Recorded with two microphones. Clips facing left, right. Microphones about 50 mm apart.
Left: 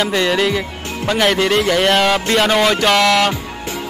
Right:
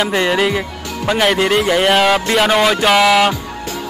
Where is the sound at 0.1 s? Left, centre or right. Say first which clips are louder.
Right 1 dB; centre.